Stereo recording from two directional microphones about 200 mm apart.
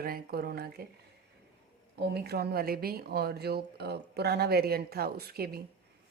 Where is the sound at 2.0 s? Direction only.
55° right (ahead or behind).